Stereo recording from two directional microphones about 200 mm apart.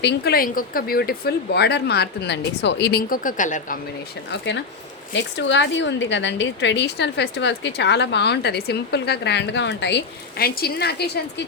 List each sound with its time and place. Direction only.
0.0 s speech: 55° left (ahead or behind); by 3.8 s 40° left (ahead or behind)
4.3 s a woman's voice: 60° left (ahead or behind)